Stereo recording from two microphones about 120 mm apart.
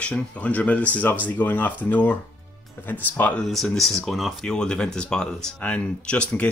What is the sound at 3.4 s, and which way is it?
Speech, 5° left (ahead or behind).